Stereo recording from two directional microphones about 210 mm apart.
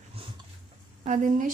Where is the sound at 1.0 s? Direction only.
35° right (ahead or behind).